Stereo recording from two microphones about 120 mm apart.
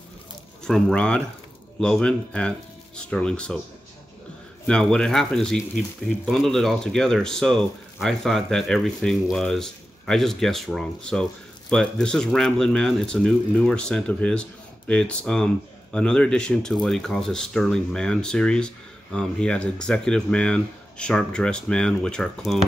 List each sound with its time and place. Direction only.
0.7 s speech: 5° left (ahead or behind)
4.6 s speech: 5° left (ahead or behind)